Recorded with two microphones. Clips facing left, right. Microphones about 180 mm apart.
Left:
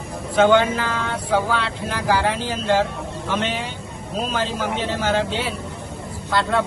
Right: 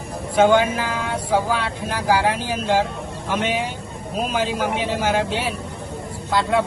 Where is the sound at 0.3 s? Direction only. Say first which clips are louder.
Even; 10° right (ahead or behind).